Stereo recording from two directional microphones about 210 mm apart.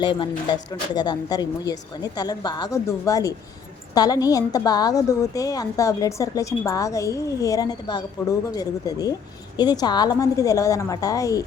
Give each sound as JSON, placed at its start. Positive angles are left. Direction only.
{"t": 0.0, "sound": "a woman's voice", "side_deg": 25}